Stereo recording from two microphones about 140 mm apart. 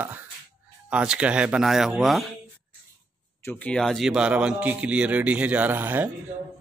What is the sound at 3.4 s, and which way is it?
A man's voice, 10° left (ahead or behind).